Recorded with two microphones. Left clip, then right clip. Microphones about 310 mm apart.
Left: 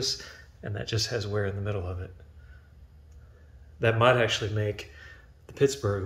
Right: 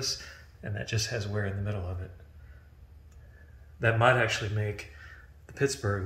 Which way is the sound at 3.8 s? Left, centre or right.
Centre.